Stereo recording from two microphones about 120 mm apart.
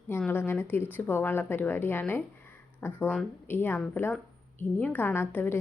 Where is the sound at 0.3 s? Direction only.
20° left (ahead or behind).